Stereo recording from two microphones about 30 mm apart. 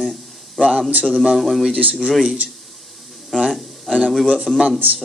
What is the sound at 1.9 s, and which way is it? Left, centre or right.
Speech, centre.